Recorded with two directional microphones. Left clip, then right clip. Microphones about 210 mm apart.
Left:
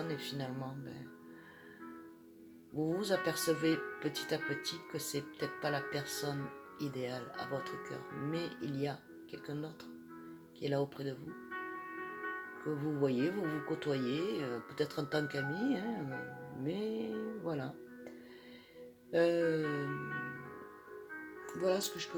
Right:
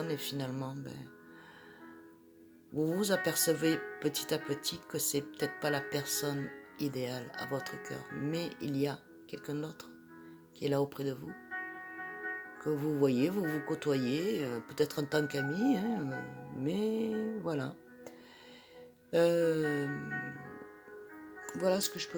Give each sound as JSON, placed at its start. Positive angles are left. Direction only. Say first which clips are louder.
{"t": 0.1, "sound": "speech", "louder": "right 3 dB", "side_deg": -50}
{"t": 2.7, "sound": "speech", "louder": "right 3 dB", "side_deg": -50}
{"t": 12.6, "sound": "speech", "louder": "right 5 dB", "side_deg": -50}
{"t": 19.1, "sound": "speech", "louder": "right 3 dB", "side_deg": -50}
{"t": 21.4, "sound": "speech", "louder": "right 3 dB", "side_deg": -55}